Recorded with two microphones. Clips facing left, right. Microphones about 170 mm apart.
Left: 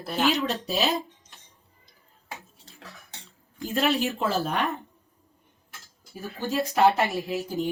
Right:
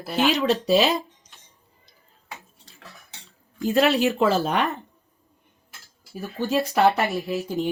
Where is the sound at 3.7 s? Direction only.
75° right (ahead or behind).